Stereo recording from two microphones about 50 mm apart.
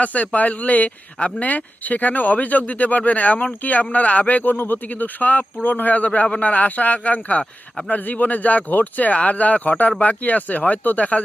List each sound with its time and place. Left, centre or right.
0.0 s a man's voice: left